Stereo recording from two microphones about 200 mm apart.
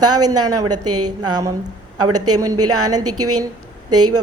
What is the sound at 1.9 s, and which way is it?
Speech, 90° right.